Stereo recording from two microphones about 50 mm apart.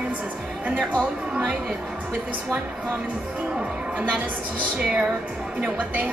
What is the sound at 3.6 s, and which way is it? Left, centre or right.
Speech, right.